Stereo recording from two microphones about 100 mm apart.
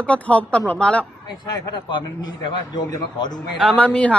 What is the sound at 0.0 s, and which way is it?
Speech, 15° left (ahead or behind).